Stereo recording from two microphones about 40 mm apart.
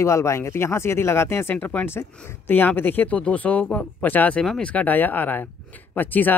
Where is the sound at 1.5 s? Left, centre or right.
Left.